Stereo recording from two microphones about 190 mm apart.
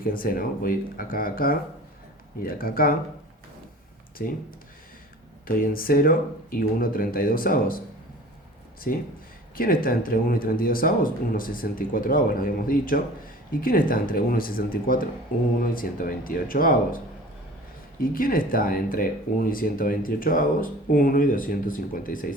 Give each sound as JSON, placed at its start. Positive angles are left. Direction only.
{"t": 0.0, "sound": "speech", "side_deg": 50}
{"t": 4.2, "sound": "speech", "side_deg": 50}
{"t": 5.5, "sound": "speech", "side_deg": 50}
{"t": 8.9, "sound": "speech", "side_deg": 45}
{"t": 18.0, "sound": "speech", "side_deg": 50}